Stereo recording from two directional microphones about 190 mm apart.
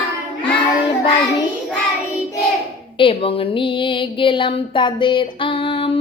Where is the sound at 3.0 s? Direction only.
30° left (ahead or behind).